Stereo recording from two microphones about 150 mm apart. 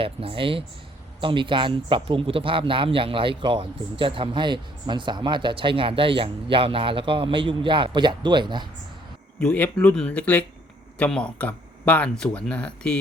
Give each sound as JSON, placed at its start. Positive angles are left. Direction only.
{"t": 0.0, "sound": "speech", "side_deg": -35}
{"t": 9.4, "sound": "speech", "side_deg": 10}